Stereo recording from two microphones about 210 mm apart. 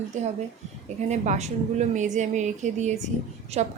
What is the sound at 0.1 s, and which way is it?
A woman's voice, 35° right (ahead or behind).